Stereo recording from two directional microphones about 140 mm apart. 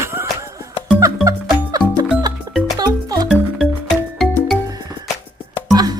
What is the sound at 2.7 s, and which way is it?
Music, 30° right (ahead or behind).